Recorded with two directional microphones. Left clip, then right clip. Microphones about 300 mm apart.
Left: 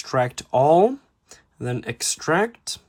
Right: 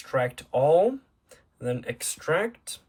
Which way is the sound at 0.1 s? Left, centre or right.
Centre.